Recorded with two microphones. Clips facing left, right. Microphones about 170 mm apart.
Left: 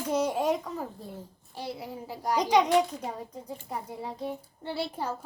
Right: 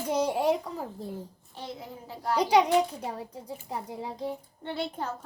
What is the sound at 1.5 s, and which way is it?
Speech, 10° left (ahead or behind).